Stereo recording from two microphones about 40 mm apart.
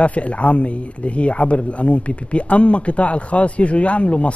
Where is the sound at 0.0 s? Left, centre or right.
Left.